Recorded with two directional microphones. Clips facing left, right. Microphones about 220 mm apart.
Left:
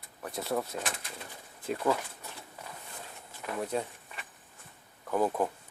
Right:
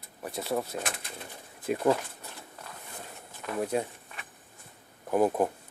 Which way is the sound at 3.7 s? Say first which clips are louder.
Right 3 dB; 10° right (ahead or behind).